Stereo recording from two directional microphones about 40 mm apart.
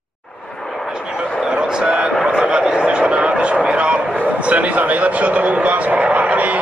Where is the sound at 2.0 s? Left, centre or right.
Right.